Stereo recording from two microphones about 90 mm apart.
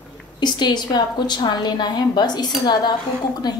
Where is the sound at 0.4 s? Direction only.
55° left (ahead or behind).